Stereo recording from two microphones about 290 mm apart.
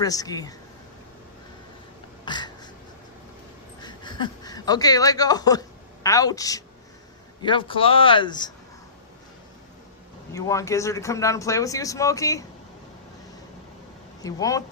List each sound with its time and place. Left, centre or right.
0.0 s speech: centre
2.2 s crow: centre
3.8 s speech: centre
10.3 s speech: centre
14.2 s speech: centre